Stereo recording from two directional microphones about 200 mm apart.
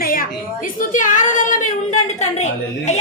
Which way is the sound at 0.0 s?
45° left (ahead or behind).